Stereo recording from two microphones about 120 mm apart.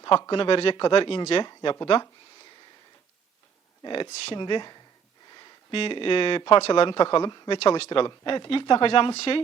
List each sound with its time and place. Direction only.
0.0 s speech: 40° left (ahead or behind)
3.8 s speech: 40° left (ahead or behind)
4.1 s speech: 55° left (ahead or behind)
4.4 s speech: 40° left (ahead or behind)